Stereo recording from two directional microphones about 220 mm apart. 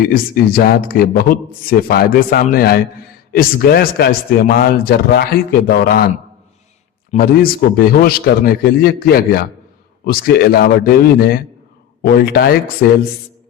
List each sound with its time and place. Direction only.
0.1 s a man's voice: 45° left (ahead or behind)
7.1 s a man's voice: 40° left (ahead or behind)